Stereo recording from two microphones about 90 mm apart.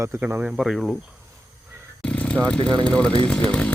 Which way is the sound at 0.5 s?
5° right (ahead or behind).